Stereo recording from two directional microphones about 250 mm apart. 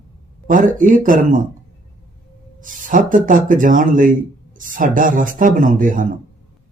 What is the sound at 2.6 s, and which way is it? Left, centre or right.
Speech, right.